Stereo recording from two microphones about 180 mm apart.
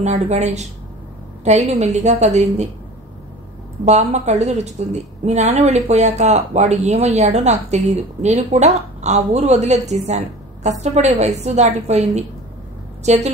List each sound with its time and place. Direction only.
0.0 s a woman's voice: 40° right (ahead or behind)
3.8 s a woman's voice: 40° right (ahead or behind)